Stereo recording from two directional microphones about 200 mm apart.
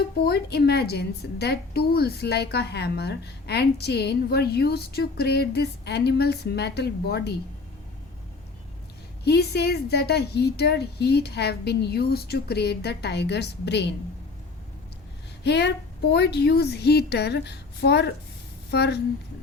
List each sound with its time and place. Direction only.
0.3 s a woman's voice: 55° left (ahead or behind)
9.2 s a woman's voice: 55° left (ahead or behind)
15.4 s a woman's voice: 60° left (ahead or behind)